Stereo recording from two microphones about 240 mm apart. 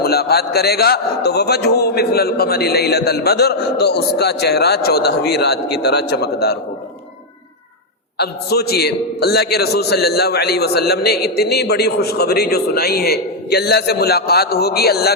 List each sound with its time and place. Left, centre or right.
0.0 s a man's voice: left
8.2 s a man's voice: left